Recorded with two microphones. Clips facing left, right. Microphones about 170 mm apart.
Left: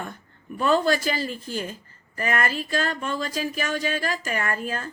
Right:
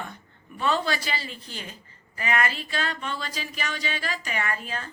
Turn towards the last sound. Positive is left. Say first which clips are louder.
# left 3 dB
turn(degrees=45)  # may be behind; listen again after turning